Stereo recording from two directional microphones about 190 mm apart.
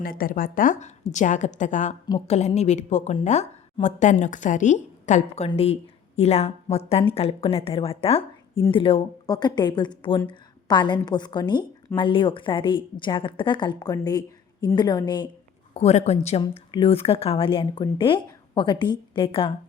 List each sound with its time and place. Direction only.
0.0 s a woman's voice: 50° left (ahead or behind)
2.0 s a woman's voice: 30° left (ahead or behind)
15.7 s a woman's voice: 35° left (ahead or behind)